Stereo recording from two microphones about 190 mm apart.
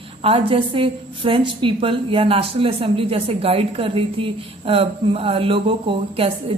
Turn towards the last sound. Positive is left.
turn(degrees=-30)  # may be behind; listen again after turning